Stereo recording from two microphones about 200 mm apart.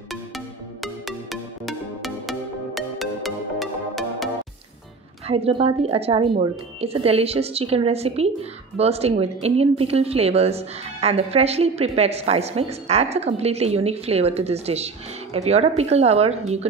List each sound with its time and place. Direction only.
1.0 s music: centre (ahead or behind)
5.2 s a woman's voice: 30° right (ahead or behind)